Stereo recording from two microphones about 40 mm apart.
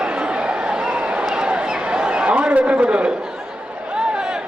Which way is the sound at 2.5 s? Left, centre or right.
Right.